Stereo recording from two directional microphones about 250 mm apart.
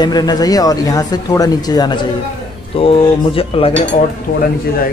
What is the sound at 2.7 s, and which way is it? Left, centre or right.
Cutlery, left.